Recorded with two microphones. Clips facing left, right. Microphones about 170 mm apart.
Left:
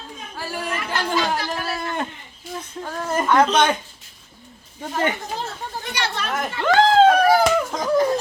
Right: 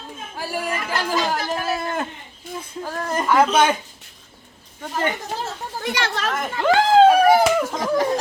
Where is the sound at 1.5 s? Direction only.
Centre (ahead or behind).